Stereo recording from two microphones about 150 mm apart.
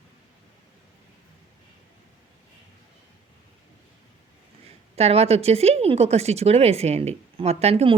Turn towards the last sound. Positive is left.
turn(degrees=-40)  # may be behind; listen again after turning